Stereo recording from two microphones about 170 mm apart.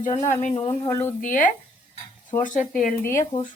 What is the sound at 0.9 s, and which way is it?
Speech, 15° left (ahead or behind).